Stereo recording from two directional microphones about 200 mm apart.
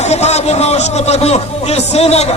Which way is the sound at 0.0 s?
35° left (ahead or behind).